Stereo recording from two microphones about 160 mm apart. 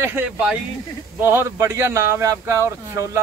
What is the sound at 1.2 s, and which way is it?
Speech, 15° right (ahead or behind).